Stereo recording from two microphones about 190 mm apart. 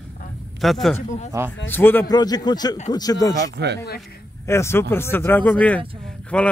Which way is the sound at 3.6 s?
60° right (ahead or behind).